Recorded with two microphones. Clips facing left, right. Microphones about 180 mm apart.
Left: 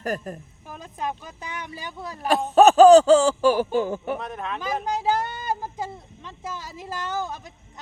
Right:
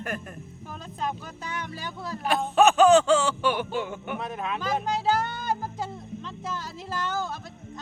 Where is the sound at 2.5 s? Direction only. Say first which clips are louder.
Left 6 dB; 40° left (ahead or behind).